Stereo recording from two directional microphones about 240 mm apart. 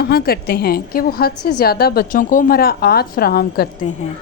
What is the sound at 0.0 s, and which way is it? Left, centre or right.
A woman's voice, left.